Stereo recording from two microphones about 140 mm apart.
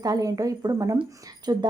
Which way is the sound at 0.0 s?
25° right (ahead or behind).